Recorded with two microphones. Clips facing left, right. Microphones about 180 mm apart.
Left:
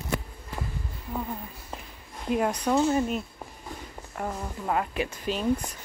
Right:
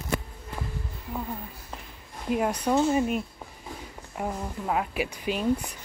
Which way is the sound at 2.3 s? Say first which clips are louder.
Even; 5° right (ahead or behind).